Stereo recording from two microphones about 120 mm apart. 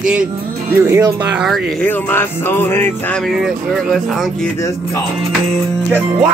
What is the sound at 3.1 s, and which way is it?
Speech, centre (ahead or behind).